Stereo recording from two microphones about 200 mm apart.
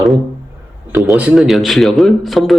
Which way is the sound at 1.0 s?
5° right (ahead or behind).